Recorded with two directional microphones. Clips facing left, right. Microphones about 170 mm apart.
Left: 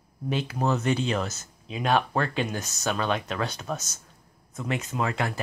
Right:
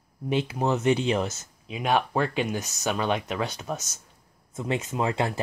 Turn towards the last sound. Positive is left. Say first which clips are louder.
# right 2 dB
turn(degrees=-25)  # may be behind; listen again after turning